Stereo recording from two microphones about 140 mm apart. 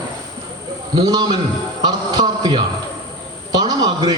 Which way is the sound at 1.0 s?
30° right (ahead or behind).